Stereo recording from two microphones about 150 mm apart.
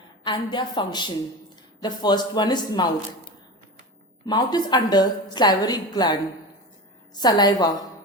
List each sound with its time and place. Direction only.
0.3 s a woman's voice: 30° left (ahead or behind)
4.3 s a woman's voice: 25° left (ahead or behind)